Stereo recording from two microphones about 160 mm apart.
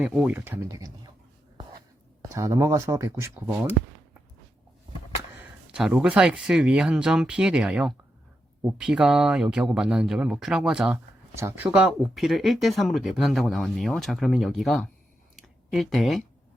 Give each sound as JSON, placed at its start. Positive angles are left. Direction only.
{"t": 0.0, "sound": "speech", "side_deg": -5}
{"t": 2.3, "sound": "speech", "side_deg": -20}
{"t": 5.4, "sound": "speech", "side_deg": -5}
{"t": 15.4, "sound": "a sound", "side_deg": 0}